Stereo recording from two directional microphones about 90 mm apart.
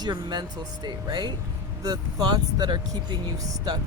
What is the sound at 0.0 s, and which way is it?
Speech, 55° right (ahead or behind).